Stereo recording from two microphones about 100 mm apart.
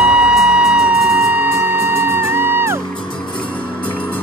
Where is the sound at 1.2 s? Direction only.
25° right (ahead or behind).